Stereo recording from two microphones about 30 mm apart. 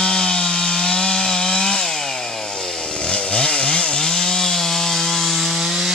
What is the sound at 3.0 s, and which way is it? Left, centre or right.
Chainsaw, left.